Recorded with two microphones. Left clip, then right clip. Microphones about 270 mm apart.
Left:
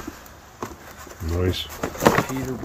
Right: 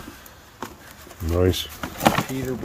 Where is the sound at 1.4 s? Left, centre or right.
Right.